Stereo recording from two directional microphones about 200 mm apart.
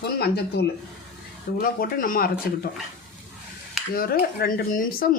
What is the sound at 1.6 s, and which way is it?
Speech, 45° left (ahead or behind).